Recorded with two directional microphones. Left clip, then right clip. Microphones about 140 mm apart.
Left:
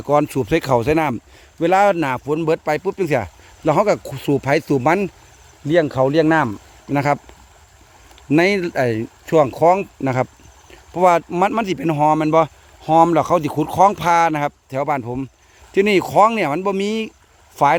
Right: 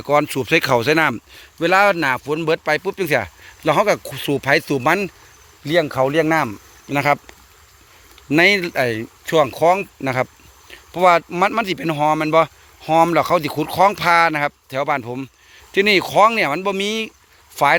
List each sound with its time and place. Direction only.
0.1 s speech: 25° left (ahead or behind)
0.5 s speech: 15° left (ahead or behind)
8.3 s speech: 20° left (ahead or behind)